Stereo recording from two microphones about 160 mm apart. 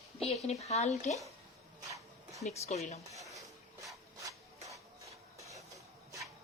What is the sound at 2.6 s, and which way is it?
Speech, 45° left (ahead or behind).